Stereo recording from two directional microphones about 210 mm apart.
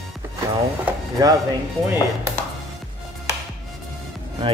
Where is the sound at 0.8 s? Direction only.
15° right (ahead or behind).